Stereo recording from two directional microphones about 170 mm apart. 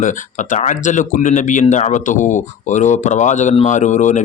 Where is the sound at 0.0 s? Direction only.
45° left (ahead or behind).